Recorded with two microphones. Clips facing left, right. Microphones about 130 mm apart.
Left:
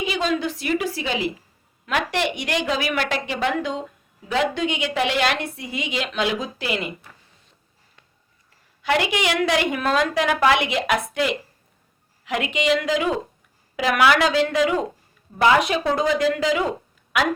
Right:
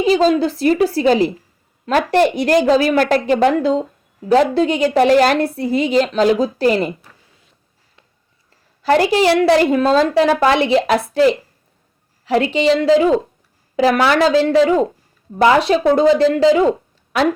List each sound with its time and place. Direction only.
0.0 s a woman's voice: 35° right (ahead or behind)
8.8 s a woman's voice: 35° right (ahead or behind)